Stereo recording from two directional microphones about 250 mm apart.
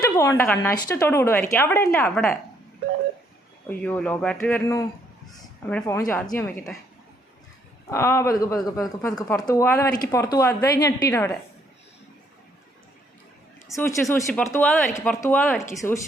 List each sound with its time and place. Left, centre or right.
0.0 s speech: centre
3.7 s speech: centre
7.9 s speech: centre
14.1 s speech: centre